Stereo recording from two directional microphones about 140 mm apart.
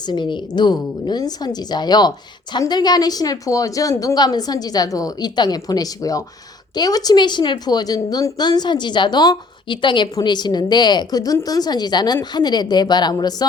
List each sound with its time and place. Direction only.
0.1 s a woman's voice: 35° left (ahead or behind)